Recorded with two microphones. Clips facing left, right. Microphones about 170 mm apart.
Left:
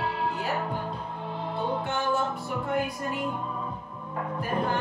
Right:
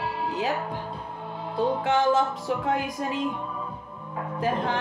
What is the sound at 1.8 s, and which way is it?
Music, 90° right.